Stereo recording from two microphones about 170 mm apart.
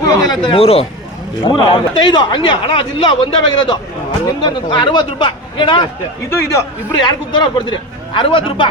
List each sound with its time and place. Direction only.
0.1 s a man's voice: 25° left (ahead or behind)
6.3 s speech: 15° left (ahead or behind)
6.9 s a man's voice: 25° left (ahead or behind)